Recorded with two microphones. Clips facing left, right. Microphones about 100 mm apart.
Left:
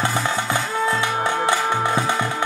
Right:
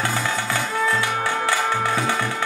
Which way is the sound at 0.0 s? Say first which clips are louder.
Left 2 dB; 20° left (ahead or behind).